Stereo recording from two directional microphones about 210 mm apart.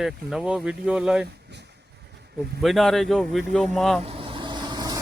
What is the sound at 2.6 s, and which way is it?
Speech, centre (ahead or behind).